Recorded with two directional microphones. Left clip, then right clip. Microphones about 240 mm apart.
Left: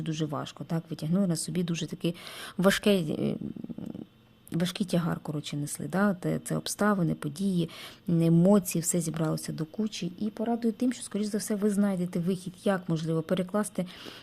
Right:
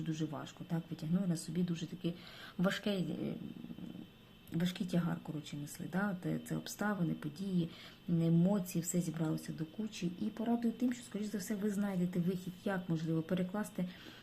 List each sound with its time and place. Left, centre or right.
0.0 s speech: left
4.5 s speech: left